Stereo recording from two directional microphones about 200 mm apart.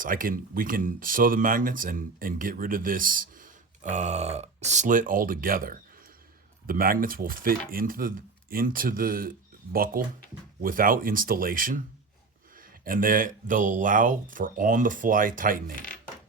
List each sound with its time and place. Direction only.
0.0 s speech: 45° right (ahead or behind)